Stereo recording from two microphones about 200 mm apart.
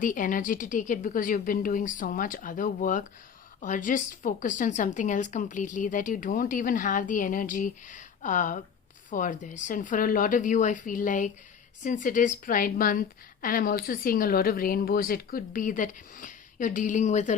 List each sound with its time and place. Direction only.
0.0 s a woman's voice: 40° left (ahead or behind)